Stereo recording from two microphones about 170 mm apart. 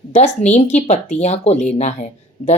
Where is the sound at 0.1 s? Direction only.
40° left (ahead or behind).